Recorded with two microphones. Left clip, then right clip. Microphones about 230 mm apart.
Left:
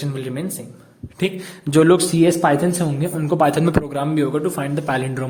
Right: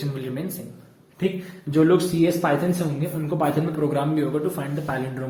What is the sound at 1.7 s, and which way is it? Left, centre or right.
Speech, left.